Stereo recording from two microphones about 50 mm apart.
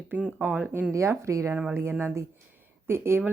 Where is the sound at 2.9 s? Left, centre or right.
Right.